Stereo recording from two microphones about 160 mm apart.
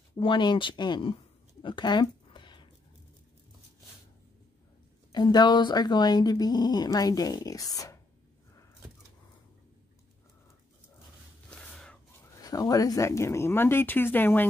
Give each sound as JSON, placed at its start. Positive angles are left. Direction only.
{"t": 0.1, "sound": "speech", "side_deg": 30}
{"t": 1.6, "sound": "a sound", "side_deg": 30}
{"t": 5.1, "sound": "speech", "side_deg": 25}
{"t": 11.4, "sound": "gasp", "side_deg": 5}
{"t": 12.4, "sound": "speech", "side_deg": 20}